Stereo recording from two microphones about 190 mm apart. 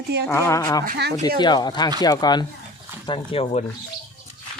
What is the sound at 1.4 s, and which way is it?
Speech, 20° left (ahead or behind).